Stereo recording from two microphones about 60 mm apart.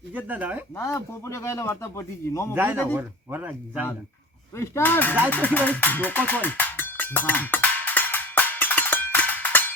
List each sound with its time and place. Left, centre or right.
0.1 s speech: right
0.8 s speech: left
3.0 s speech: right
4.5 s speech: left
4.8 s speech: left
5.3 s music: left